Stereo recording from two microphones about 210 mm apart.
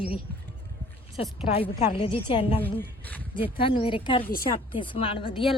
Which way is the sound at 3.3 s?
25° left (ahead or behind).